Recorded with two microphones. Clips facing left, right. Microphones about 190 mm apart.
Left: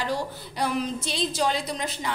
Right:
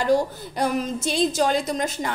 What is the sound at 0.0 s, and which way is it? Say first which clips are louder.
A woman's voice: right 8 dB; 45° right (ahead or behind).